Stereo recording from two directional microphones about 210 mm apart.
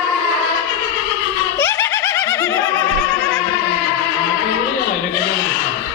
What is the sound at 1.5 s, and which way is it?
Laughter, 10° left (ahead or behind).